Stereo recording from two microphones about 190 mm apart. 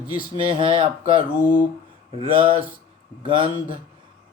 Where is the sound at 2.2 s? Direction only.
30° right (ahead or behind).